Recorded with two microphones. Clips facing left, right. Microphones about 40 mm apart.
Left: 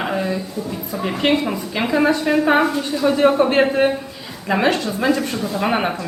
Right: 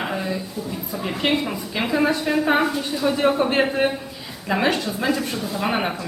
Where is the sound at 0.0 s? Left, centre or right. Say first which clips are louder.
Left 4 dB; centre.